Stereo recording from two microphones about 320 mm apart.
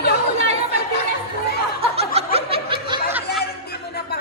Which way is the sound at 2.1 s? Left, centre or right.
Centre.